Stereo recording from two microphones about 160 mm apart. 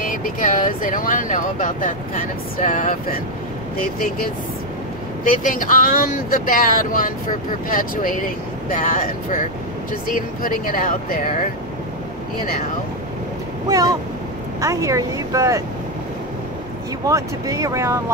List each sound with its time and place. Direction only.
0.0 s speech: 55° left (ahead or behind)
5.2 s speech: 60° left (ahead or behind)
13.7 s speech: 20° right (ahead or behind)
17.0 s speech: 20° right (ahead or behind)